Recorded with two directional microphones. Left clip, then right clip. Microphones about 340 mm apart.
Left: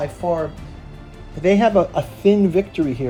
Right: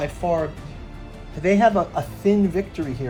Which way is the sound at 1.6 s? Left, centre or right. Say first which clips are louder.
Left 2 dB; centre.